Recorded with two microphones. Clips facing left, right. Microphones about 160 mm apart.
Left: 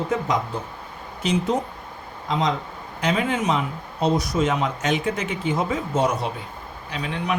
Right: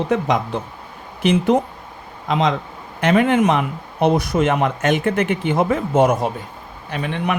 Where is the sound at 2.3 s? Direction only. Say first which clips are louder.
Right 4 dB; 75° right (ahead or behind).